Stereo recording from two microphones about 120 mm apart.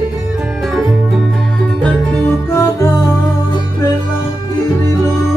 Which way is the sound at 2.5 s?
25° left (ahead or behind).